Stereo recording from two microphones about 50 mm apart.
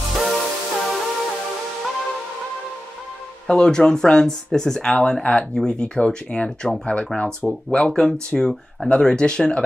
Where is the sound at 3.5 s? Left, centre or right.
Centre.